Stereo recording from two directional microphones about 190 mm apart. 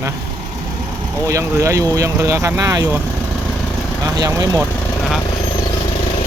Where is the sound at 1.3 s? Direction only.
15° right (ahead or behind).